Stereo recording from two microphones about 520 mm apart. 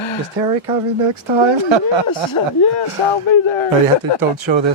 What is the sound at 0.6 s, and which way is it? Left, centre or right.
Speech, right.